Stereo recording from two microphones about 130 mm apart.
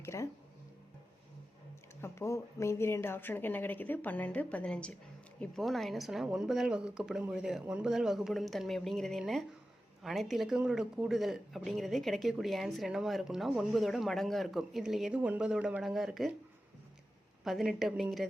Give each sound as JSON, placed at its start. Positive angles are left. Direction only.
{"t": 0.0, "sound": "speech", "side_deg": 20}
{"t": 2.0, "sound": "speech", "side_deg": 20}
{"t": 17.4, "sound": "speech", "side_deg": 0}